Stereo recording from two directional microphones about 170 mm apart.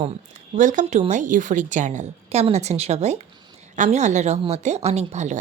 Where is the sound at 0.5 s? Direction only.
50° right (ahead or behind).